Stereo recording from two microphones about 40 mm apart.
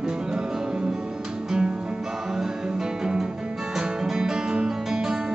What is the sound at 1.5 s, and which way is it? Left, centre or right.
Music, centre.